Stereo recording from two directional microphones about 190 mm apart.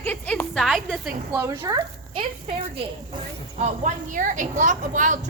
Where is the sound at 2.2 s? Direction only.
30° right (ahead or behind).